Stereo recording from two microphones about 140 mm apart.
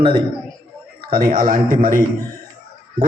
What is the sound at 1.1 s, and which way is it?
Speech, 90° right.